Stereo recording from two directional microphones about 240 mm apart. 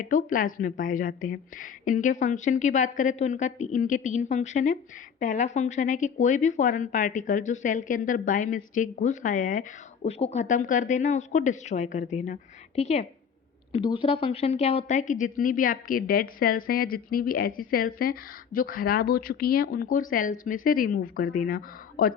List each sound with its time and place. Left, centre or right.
0.0 s a woman's voice: left